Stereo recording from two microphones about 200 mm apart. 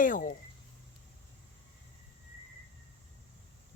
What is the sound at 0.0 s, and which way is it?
Speech, 40° left (ahead or behind).